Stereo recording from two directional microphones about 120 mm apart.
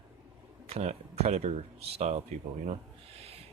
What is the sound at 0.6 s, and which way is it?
Speech, 60° right (ahead or behind).